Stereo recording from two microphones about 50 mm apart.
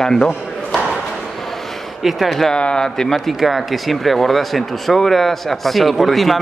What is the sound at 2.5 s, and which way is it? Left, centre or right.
Speech, centre.